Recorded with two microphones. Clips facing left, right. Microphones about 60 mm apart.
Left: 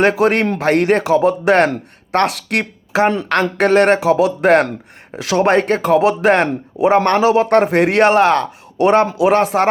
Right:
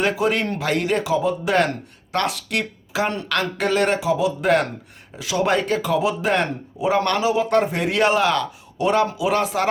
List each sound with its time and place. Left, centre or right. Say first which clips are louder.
0.0 s a man's voice: left 7 dB; left
7.2 s a man's voice: left 6 dB; left